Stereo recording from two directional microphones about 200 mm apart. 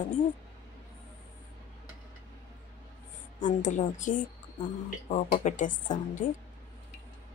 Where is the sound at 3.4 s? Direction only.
40° left (ahead or behind).